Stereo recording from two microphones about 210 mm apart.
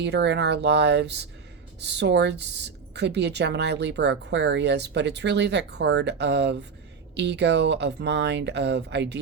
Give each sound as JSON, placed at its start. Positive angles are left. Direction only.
{"t": 0.0, "sound": "a woman's voice", "side_deg": -55}